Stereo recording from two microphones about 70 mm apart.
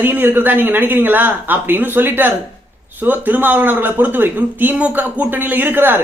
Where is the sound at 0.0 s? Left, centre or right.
Right.